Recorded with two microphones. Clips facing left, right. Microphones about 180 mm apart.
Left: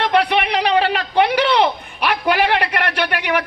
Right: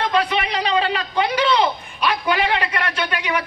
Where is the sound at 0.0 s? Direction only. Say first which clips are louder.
Left 3 dB; 65° left (ahead or behind).